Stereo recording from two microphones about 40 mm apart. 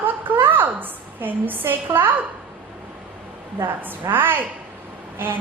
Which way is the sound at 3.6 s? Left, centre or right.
Right.